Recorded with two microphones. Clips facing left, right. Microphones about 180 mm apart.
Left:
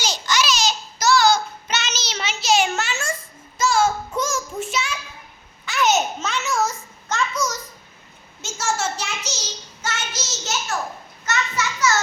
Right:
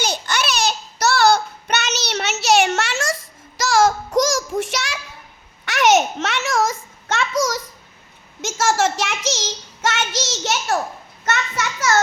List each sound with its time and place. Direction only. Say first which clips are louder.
0.0 s child singing: even; 60° right (ahead or behind); by 3.1 s 75° right (ahead or behind)
3.6 s child singing: right 3 dB; 90° right
5.6 s a sound: right 4 dB; 80° right
8.5 s child singing: right 6 dB; 90° right; by 10.8 s 65° right (ahead or behind)
11.3 s children playing: right 2 dB; 55° right (ahead or behind)